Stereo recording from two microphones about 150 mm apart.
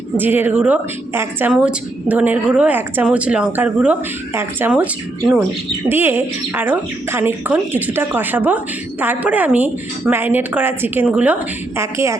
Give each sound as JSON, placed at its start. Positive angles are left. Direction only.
{"t": 0.2, "sound": "speech", "side_deg": -15}
{"t": 5.9, "sound": "speech", "side_deg": -15}